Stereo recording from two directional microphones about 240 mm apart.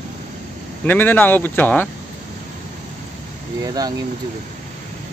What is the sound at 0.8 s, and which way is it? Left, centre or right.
Speech, centre.